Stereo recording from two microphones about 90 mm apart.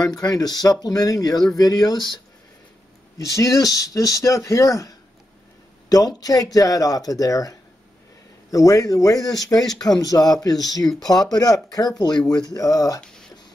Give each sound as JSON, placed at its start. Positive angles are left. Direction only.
{"t": 0.0, "sound": "speech", "side_deg": 45}
{"t": 3.2, "sound": "speech", "side_deg": 35}